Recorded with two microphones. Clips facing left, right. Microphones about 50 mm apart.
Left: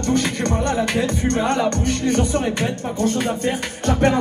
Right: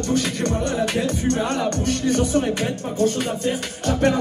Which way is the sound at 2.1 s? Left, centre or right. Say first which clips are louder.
Right 1 dB; left.